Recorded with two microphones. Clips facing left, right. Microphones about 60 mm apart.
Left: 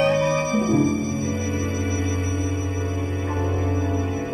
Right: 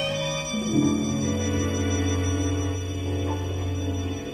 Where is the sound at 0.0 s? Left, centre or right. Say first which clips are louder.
Left 9 dB; left.